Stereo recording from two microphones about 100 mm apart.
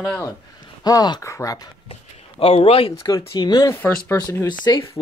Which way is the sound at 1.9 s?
80° left.